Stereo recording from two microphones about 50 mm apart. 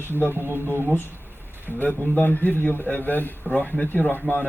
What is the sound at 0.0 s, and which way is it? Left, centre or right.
Speech, right.